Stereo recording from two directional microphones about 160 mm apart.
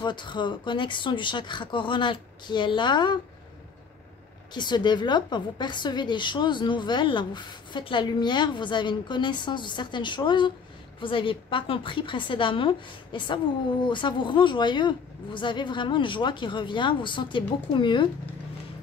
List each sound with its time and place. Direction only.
0.0 s a woman's voice: 30° left (ahead or behind)
4.6 s a woman's voice: 25° left (ahead or behind)